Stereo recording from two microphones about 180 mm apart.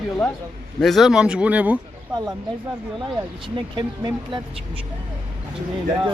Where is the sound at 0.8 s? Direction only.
Centre (ahead or behind).